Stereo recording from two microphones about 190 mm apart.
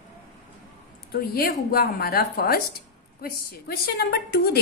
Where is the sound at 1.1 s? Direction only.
55° left (ahead or behind).